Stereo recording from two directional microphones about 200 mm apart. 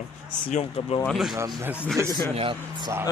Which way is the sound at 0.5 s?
35° left (ahead or behind).